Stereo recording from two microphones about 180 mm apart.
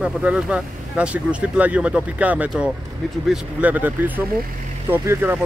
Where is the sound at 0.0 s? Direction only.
5° right (ahead or behind).